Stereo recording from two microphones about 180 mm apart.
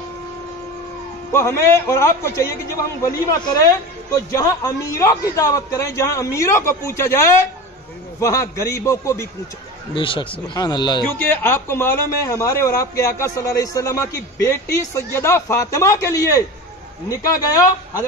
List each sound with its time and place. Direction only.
1.3 s a man's voice: 15° left (ahead or behind)
9.9 s a man's voice: 30° left (ahead or behind)
11.2 s a man's voice: 15° left (ahead or behind)